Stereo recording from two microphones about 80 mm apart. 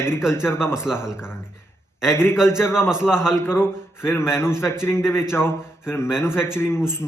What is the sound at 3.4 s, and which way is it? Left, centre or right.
Speech, left.